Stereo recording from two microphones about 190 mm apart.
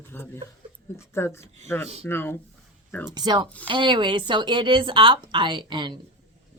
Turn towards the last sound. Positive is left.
turn(degrees=-25)  # may be behind; listen again after turning